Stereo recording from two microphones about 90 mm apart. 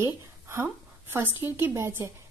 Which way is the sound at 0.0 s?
30° right (ahead or behind).